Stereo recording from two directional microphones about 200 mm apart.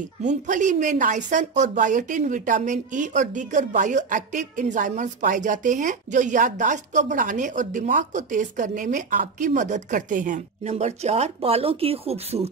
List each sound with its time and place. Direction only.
0.2 s a woman's voice: 40° right (ahead or behind)